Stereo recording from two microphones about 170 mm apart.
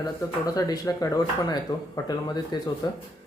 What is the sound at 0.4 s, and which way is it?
Speech, 20° left (ahead or behind).